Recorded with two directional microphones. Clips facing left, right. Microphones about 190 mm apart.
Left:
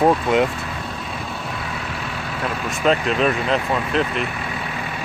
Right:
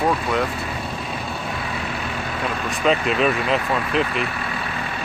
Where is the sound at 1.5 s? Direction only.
Centre (ahead or behind).